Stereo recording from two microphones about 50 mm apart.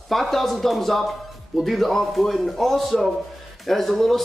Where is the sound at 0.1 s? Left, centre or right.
Centre.